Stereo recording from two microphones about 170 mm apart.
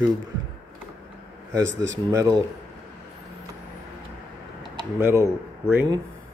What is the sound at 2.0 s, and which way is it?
Speech, 20° right (ahead or behind).